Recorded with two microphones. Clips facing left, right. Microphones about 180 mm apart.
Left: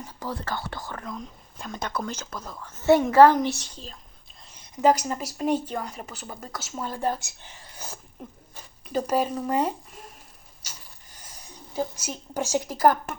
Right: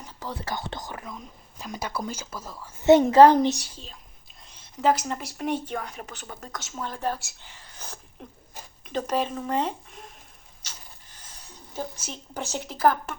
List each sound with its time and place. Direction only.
0.4 s a woman's voice: 20° right (ahead or behind)
4.8 s a woman's voice: 10° left (ahead or behind)
10.6 s a sound: 10° left (ahead or behind)